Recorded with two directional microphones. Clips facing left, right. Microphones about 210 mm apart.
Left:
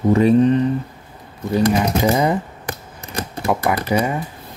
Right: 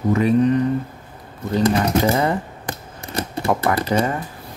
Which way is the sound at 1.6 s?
15° left (ahead or behind).